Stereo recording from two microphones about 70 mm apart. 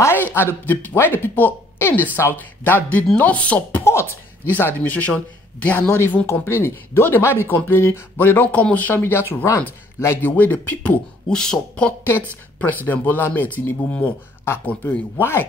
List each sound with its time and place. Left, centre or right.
0.0 s speech: left
3.7 s speech: left
9.0 s speech: left
10.3 s speech: left
11.2 s speech: centre
12.5 s speech: left